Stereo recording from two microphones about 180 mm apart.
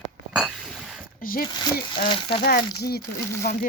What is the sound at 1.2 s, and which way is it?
Speech, 55° left (ahead or behind).